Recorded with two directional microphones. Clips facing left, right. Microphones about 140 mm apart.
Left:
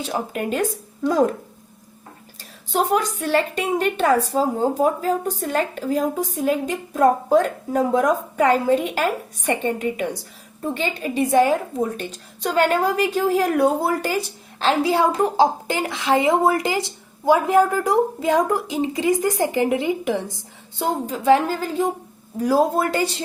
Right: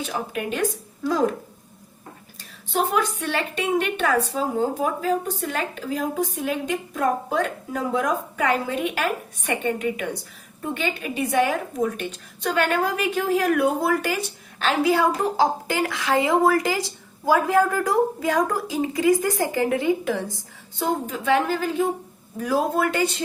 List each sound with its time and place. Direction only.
0.0 s a woman's voice: 35° left (ahead or behind)
2.7 s a woman's voice: 40° left (ahead or behind)